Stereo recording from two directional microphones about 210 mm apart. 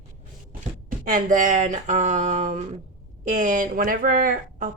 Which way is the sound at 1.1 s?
40° right (ahead or behind).